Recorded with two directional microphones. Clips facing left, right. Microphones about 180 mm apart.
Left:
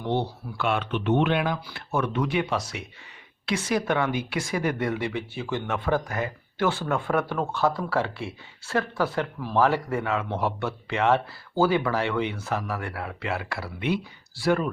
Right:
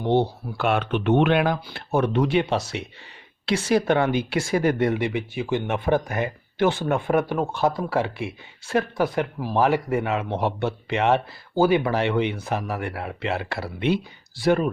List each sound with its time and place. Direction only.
0.0 s speech: 30° right (ahead or behind)
0.5 s speech: 45° right (ahead or behind); by 1.5 s 65° right (ahead or behind)
1.6 s speech: 30° right (ahead or behind)